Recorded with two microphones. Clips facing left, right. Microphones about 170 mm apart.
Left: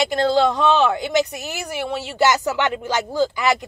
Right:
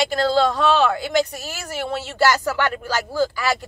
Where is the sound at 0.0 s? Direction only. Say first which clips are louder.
Left 1 dB; 20° left (ahead or behind).